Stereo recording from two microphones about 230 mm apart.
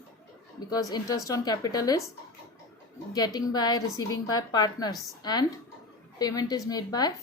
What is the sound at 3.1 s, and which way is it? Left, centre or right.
A woman's voice, centre.